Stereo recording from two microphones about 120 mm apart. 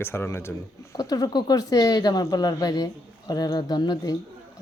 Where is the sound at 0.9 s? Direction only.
30° left (ahead or behind).